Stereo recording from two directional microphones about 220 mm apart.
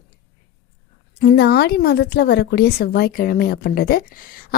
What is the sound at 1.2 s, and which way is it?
A woman's voice, 50° left (ahead or behind).